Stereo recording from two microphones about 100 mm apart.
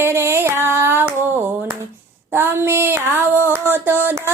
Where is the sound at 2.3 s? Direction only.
20° right (ahead or behind).